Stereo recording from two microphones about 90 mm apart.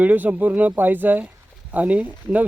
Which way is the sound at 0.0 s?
20° right (ahead or behind).